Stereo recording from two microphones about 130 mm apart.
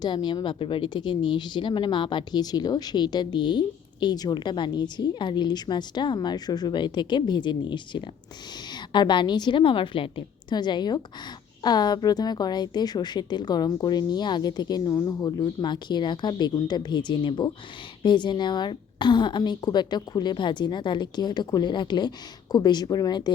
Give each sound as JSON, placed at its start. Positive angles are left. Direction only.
{"t": 0.0, "sound": "a woman's voice", "side_deg": 35}